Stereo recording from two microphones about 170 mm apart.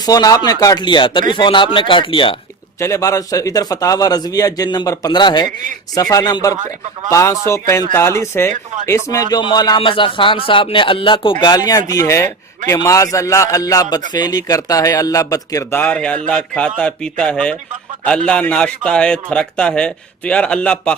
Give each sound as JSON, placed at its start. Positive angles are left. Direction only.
{"t": 0.0, "sound": "speech", "side_deg": 20}
{"t": 2.8, "sound": "speech", "side_deg": 15}
{"t": 8.4, "sound": "speech", "side_deg": -45}
{"t": 9.0, "sound": "a man's voice", "side_deg": 20}